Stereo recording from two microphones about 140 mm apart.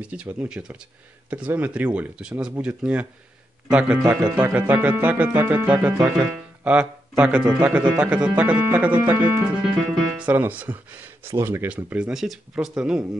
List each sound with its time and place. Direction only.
0.0 s speech: 10° right (ahead or behind)
5.3 s music: 25° right (ahead or behind)
5.7 s speech: 10° right (ahead or behind)